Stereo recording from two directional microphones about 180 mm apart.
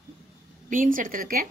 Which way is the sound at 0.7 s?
45° right (ahead or behind).